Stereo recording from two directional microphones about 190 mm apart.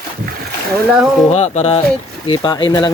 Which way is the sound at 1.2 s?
35° left (ahead or behind).